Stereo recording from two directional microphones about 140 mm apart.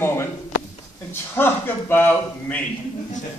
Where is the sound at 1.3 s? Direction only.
15° left (ahead or behind).